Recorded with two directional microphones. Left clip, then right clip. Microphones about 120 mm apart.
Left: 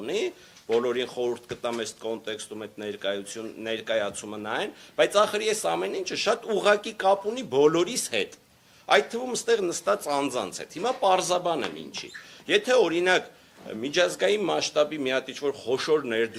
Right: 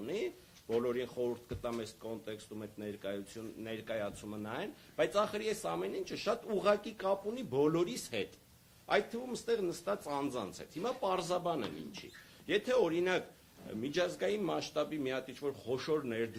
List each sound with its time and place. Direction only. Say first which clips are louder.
0.0 s speech: left 10 dB; 30° left (ahead or behind)
0.7 s speech: left 10 dB; 40° left (ahead or behind)